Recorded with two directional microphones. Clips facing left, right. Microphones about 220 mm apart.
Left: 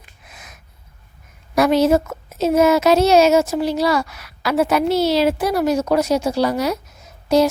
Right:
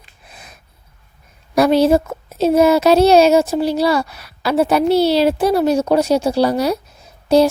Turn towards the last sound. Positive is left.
turn(degrees=-30)  # may be behind; listen again after turning